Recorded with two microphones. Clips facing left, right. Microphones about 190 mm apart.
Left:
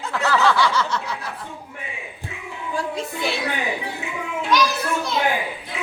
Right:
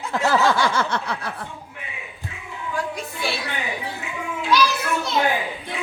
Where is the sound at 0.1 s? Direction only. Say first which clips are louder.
Right 1 dB; 15° right (ahead or behind).